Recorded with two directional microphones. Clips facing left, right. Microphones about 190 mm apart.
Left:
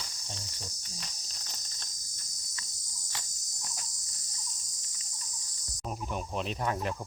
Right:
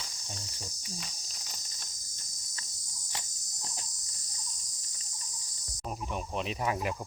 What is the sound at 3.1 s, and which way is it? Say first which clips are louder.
Cricket: right 2 dB; 25° right (ahead or behind).